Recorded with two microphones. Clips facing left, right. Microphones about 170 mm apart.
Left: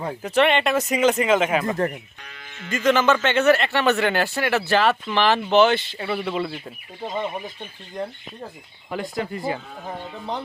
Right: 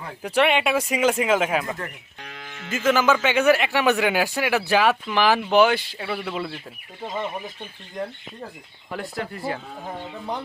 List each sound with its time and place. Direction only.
0.2 s speech: 10° right (ahead or behind)
2.2 s music: 60° right (ahead or behind)
2.6 s speech: 5° right (ahead or behind)
8.9 s speech: centre (ahead or behind)